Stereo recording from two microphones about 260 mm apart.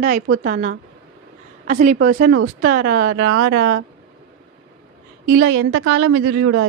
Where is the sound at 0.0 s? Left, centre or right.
Right.